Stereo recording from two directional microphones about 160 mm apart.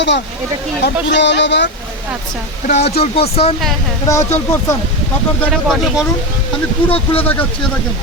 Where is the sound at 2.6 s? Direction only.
45° left (ahead or behind).